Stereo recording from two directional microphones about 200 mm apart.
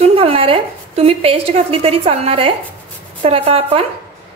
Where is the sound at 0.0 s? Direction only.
30° right (ahead or behind).